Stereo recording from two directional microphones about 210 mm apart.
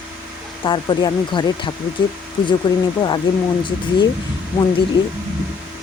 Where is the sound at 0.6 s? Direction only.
20° left (ahead or behind).